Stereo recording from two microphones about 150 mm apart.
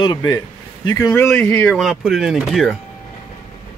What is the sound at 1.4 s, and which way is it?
Speech, 10° left (ahead or behind).